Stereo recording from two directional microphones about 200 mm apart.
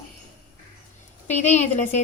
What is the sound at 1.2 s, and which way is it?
Speech, 35° left (ahead or behind).